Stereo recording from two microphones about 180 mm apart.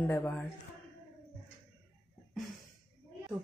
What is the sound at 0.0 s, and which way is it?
Speech, 5° left (ahead or behind).